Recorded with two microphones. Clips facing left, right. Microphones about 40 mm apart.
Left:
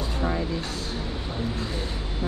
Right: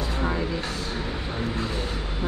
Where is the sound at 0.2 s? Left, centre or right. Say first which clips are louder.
Even; right.